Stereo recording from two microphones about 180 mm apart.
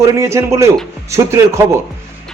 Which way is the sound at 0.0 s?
15° right (ahead or behind).